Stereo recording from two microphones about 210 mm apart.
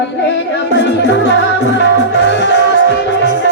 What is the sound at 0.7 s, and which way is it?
Music, 55° left (ahead or behind).